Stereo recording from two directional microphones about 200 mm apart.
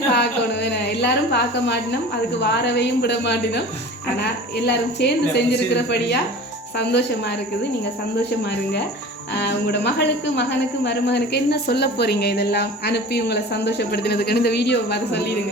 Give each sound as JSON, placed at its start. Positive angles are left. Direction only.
{"t": 0.1, "sound": "a woman's voice", "side_deg": 55}
{"t": 9.3, "sound": "speech", "side_deg": 55}